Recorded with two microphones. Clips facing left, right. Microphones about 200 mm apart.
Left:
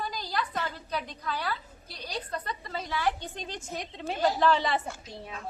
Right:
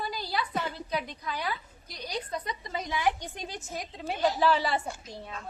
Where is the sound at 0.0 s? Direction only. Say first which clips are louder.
Even; 10° right (ahead or behind).